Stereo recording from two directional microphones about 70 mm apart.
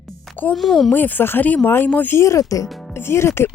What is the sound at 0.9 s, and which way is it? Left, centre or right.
Speech, left.